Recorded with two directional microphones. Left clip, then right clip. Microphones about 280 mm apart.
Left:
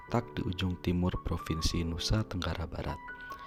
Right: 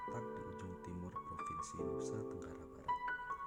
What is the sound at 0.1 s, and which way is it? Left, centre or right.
Speech, left.